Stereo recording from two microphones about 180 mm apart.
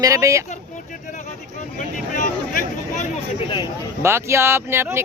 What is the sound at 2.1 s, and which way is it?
Speech, 45° left (ahead or behind).